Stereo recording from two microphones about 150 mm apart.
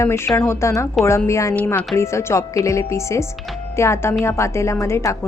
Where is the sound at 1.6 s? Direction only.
10° left (ahead or behind).